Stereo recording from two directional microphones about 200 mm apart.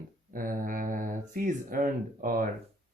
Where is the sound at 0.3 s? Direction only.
45° right (ahead or behind).